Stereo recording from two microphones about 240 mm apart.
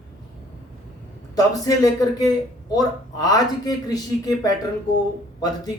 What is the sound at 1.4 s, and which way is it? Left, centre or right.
Speech, centre.